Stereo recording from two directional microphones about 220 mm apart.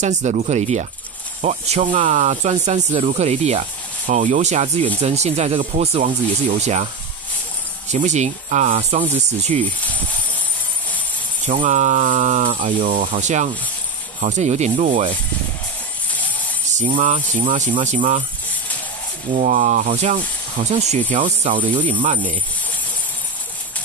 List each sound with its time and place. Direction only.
0.0 s speech: 30° right (ahead or behind)
7.9 s speech: 30° right (ahead or behind)
11.4 s speech: 35° right (ahead or behind)
16.7 s speech: 35° right (ahead or behind)
19.3 s speech: 35° right (ahead or behind)
21.5 s speech: 20° right (ahead or behind)
22.0 s speech: 35° right (ahead or behind)